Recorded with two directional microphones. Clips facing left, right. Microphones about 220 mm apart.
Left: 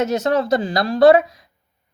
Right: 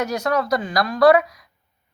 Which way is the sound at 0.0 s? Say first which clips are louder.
Left 4 dB; 25° left (ahead or behind).